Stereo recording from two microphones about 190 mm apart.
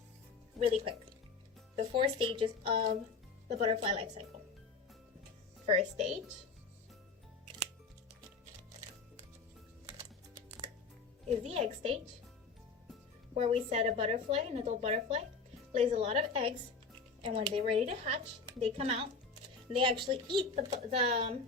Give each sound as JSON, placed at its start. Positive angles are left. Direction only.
{"t": 1.7, "sound": "a woman's voice", "side_deg": -30}
{"t": 5.6, "sound": "a woman's voice", "side_deg": -35}
{"t": 11.4, "sound": "a woman's voice", "side_deg": -35}
{"t": 13.3, "sound": "a woman's voice", "side_deg": -35}